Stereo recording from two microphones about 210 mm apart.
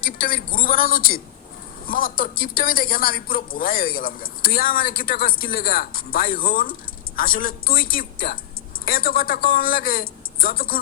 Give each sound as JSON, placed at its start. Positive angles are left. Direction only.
{"t": 0.0, "sound": "a woman's voice", "side_deg": 45}